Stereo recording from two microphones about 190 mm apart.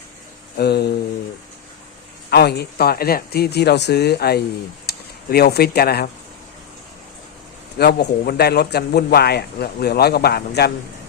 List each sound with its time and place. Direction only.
0.5 s a man's voice: 55° left (ahead or behind)
2.3 s a man's voice: 60° left (ahead or behind)
7.8 s a man's voice: 55° left (ahead or behind)